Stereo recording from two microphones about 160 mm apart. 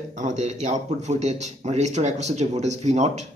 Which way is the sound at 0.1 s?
50° right (ahead or behind).